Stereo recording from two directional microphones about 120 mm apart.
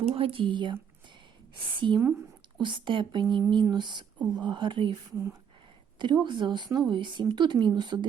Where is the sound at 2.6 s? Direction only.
40° right (ahead or behind).